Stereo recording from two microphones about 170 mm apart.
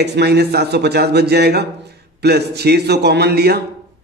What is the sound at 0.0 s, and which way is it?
A man's voice, 75° right (ahead or behind).